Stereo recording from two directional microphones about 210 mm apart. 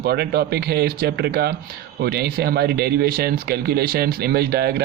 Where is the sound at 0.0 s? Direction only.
50° right (ahead or behind).